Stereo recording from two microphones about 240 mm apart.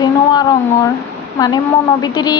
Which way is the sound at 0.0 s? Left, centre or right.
Centre.